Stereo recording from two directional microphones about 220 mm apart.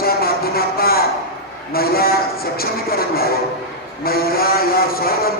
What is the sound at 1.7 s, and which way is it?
Speech, 45° left (ahead or behind).